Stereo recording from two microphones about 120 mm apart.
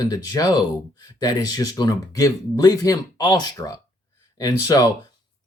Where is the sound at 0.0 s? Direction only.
30° left (ahead or behind).